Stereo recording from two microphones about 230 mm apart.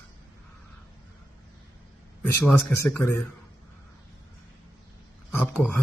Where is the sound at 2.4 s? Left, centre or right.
Centre.